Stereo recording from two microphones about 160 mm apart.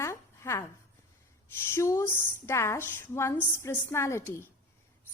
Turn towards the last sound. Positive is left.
turn(degrees=15)  # may be behind; listen again after turning